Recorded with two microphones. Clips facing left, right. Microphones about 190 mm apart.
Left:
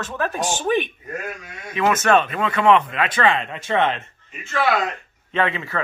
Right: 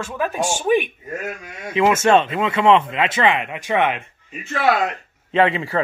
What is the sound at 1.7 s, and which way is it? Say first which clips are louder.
Speech: right 3 dB; 25° right (ahead or behind).